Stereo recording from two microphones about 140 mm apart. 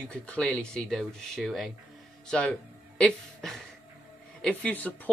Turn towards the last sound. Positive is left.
turn(degrees=10)  # may be behind; listen again after turning